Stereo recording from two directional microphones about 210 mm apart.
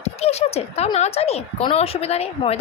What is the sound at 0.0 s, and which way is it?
A woman's voice, 30° left (ahead or behind).